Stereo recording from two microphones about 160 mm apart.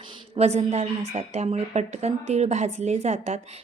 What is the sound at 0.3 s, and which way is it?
A woman's voice, 40° right (ahead or behind).